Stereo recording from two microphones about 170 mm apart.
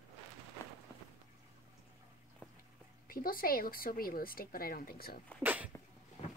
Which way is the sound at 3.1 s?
60° left (ahead or behind).